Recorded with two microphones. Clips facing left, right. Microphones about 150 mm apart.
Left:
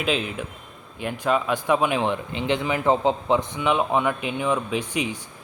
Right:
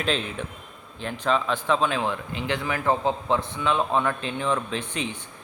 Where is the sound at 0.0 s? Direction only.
5° left (ahead or behind).